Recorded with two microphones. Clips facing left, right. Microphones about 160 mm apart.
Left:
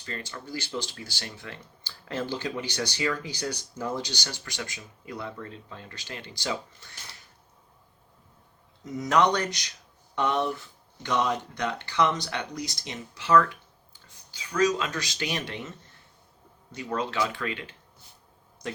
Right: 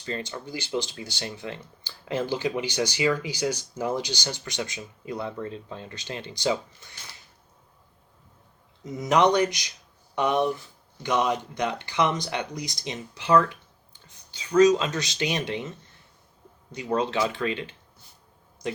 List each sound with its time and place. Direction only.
0.0 s speech: 20° right (ahead or behind)
9.0 s speech: 15° right (ahead or behind)
16.7 s speech: 20° right (ahead or behind)